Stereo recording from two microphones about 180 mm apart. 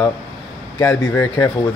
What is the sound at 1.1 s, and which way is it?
Speech, 15° left (ahead or behind).